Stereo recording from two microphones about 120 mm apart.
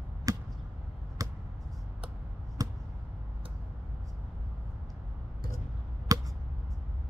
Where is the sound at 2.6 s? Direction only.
30° right (ahead or behind).